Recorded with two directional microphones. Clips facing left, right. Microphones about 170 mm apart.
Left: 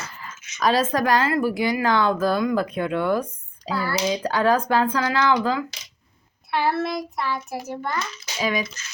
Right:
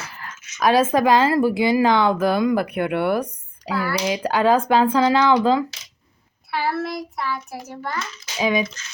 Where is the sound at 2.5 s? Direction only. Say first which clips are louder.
Right 2 dB; 65° right (ahead or behind).